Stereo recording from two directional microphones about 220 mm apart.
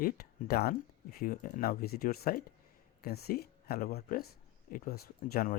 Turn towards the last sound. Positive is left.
turn(degrees=40)  # may be behind; listen again after turning